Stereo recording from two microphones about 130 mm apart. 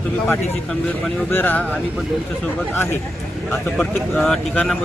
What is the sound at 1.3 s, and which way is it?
Speech, 15° left (ahead or behind).